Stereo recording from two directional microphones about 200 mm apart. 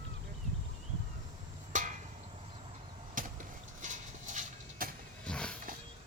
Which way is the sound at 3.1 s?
40° right (ahead or behind).